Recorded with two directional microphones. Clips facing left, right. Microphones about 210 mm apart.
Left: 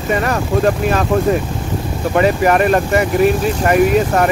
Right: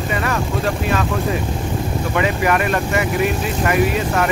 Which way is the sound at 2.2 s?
40° left (ahead or behind).